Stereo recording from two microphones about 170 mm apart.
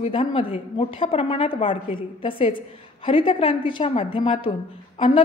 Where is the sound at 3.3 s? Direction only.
45° left (ahead or behind).